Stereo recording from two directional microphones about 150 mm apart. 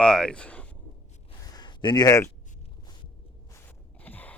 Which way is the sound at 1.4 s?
25° left (ahead or behind).